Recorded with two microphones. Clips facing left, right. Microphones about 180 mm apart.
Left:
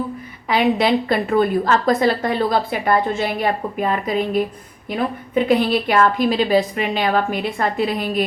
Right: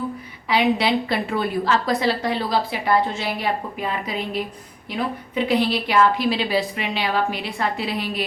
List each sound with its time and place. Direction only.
0.8 s a woman's voice: 50° left (ahead or behind)